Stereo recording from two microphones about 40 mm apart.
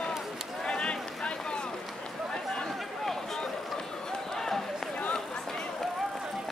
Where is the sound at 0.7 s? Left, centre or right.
Left.